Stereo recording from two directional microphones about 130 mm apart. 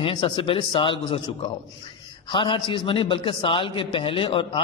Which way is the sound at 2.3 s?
40° left (ahead or behind).